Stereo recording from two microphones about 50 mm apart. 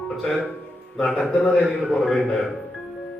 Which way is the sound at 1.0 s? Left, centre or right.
Left.